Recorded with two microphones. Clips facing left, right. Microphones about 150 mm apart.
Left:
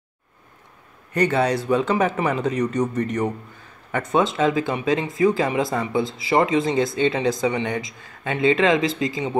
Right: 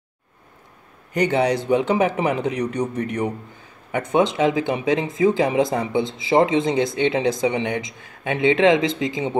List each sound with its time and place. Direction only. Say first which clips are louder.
1.1 s a man's voice: right 1 dB; 15° right (ahead or behind)